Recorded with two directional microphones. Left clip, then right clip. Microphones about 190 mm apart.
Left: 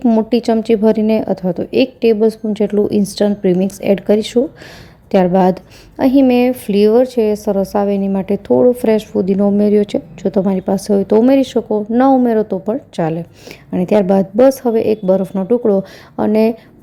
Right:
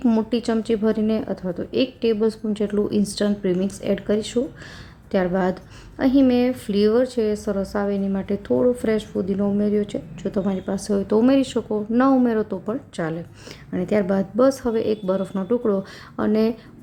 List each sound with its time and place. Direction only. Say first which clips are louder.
0.0 s a woman's voice: left 8 dB; 20° left (ahead or behind)